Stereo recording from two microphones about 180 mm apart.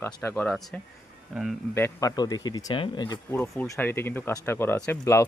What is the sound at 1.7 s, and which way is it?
Speech, 15° left (ahead or behind).